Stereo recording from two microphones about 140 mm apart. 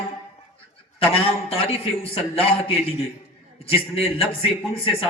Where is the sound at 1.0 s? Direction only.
40° left (ahead or behind).